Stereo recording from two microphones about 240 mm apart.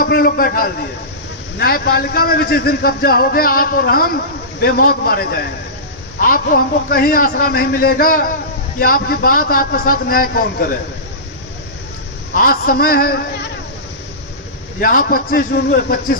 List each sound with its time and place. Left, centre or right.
0.0 s a man's voice: left
12.4 s a man's voice: left
14.8 s a man's voice: left